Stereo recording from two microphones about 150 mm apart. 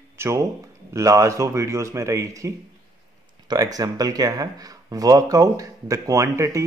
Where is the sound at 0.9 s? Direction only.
20° right (ahead or behind).